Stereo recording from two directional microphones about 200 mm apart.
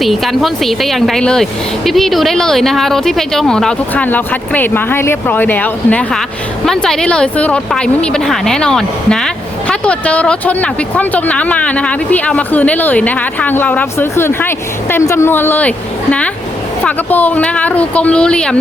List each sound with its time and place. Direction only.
0.0 s speech: centre (ahead or behind)